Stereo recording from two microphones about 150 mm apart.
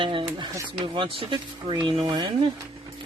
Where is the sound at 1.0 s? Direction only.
35° right (ahead or behind).